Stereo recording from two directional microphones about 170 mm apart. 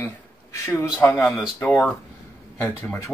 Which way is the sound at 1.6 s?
10° left (ahead or behind).